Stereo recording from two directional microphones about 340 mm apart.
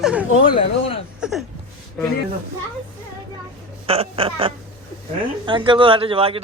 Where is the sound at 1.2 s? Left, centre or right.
Centre.